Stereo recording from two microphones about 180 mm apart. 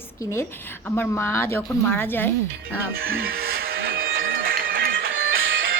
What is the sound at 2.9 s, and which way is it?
Music, 55° right (ahead or behind).